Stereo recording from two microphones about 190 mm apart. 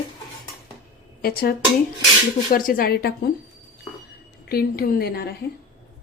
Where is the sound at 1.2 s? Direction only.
55° left (ahead or behind).